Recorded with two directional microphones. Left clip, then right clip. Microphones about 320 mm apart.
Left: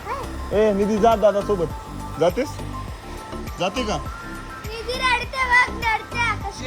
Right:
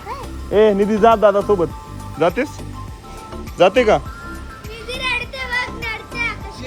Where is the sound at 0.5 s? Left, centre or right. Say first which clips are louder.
Right 5 dB; centre.